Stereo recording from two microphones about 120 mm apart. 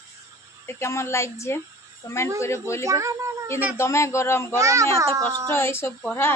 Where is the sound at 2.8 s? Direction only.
25° right (ahead or behind).